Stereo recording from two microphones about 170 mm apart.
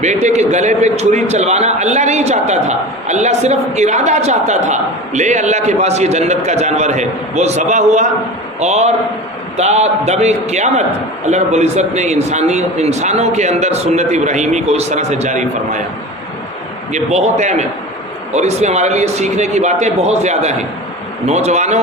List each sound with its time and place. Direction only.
0.0 s a man's voice: 45° right (ahead or behind)
16.9 s a man's voice: 40° right (ahead or behind)